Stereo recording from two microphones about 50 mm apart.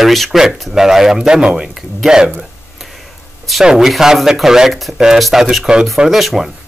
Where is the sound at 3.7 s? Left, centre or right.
Centre.